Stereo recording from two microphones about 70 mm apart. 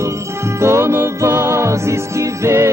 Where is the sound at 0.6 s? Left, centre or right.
Right.